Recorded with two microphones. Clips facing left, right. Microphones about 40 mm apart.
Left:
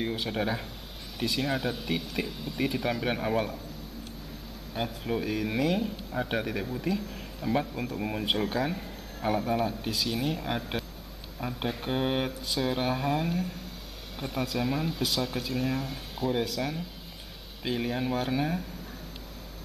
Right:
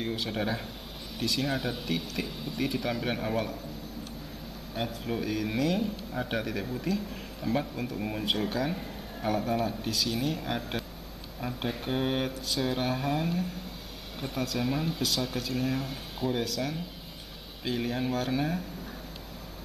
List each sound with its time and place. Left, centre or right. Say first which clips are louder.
0.0 s a man's voice: left 1 dB; centre
4.7 s a man's voice: left 1 dB; centre